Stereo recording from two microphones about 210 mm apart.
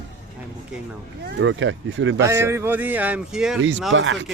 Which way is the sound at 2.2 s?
15° right (ahead or behind).